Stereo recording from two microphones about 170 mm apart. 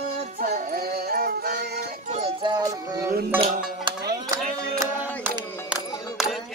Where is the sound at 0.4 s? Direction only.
55° right (ahead or behind).